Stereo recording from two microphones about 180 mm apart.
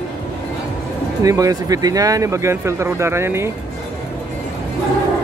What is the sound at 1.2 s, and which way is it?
Speech, 20° right (ahead or behind).